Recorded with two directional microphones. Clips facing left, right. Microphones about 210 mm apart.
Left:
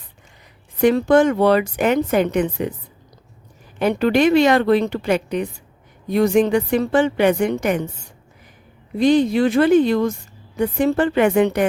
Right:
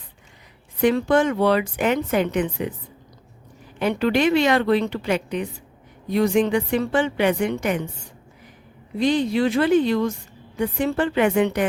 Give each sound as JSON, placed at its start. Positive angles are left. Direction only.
{"t": 0.8, "sound": "a woman's voice", "side_deg": 45}
{"t": 3.8, "sound": "a woman's voice", "side_deg": 45}
{"t": 9.0, "sound": "a woman's voice", "side_deg": 45}